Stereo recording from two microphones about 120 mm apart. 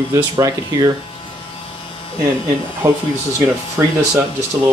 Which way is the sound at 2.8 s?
25° right (ahead or behind).